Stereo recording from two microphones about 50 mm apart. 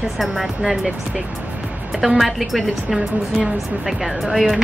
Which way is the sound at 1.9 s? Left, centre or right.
Centre.